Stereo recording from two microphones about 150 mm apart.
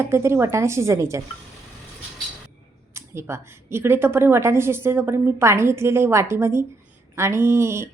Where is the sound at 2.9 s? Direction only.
15° right (ahead or behind).